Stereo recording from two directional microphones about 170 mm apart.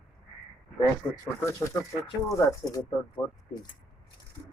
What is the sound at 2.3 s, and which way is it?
Speech, 15° left (ahead or behind).